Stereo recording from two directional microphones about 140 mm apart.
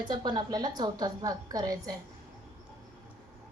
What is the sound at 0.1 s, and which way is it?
A woman's voice, 30° right (ahead or behind).